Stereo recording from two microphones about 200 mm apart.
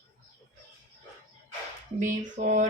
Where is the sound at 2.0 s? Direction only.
40° right (ahead or behind).